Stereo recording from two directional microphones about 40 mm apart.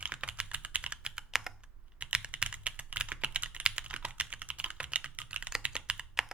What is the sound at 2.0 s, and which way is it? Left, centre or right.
Computer keyboard, right.